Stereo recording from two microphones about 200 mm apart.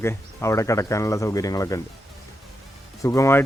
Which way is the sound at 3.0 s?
15° left (ahead or behind).